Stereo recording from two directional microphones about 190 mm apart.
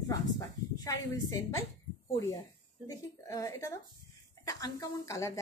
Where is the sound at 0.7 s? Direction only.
15° left (ahead or behind).